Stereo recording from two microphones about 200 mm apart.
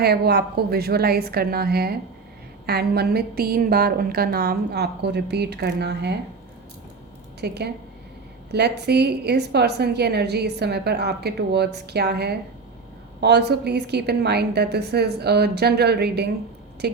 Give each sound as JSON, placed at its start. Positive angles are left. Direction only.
{"t": 0.0, "sound": "a woman's voice", "side_deg": -50}
{"t": 7.4, "sound": "a woman's voice", "side_deg": -55}